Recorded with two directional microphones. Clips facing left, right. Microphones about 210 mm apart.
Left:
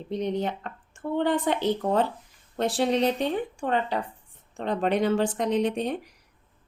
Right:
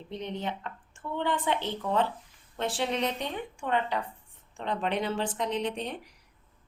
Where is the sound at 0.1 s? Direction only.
40° left (ahead or behind).